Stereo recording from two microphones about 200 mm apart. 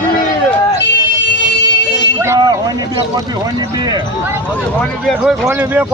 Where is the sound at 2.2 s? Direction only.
15° right (ahead or behind).